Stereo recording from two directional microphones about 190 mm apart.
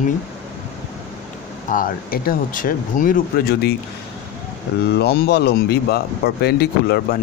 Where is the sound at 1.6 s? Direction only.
45° left (ahead or behind).